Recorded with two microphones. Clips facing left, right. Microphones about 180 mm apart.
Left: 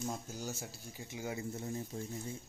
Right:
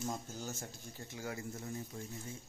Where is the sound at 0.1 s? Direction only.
10° left (ahead or behind); by 2.3 s 30° left (ahead or behind).